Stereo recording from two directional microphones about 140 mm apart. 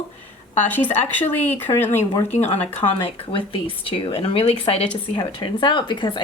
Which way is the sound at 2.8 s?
35° left (ahead or behind).